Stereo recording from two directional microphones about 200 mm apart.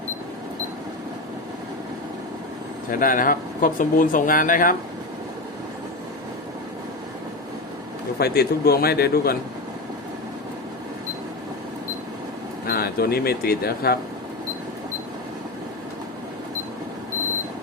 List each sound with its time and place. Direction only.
3.0 s speech: 45° left (ahead or behind)
8.2 s speech: 50° left (ahead or behind)
12.6 s speech: 50° left (ahead or behind)